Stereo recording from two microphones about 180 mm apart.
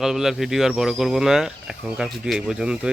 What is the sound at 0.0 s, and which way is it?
Speech, centre (ahead or behind).